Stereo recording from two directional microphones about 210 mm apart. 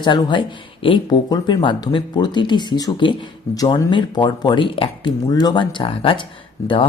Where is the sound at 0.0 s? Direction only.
20° left (ahead or behind).